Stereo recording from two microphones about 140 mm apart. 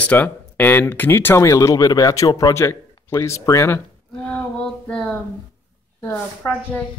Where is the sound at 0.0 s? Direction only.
10° left (ahead or behind).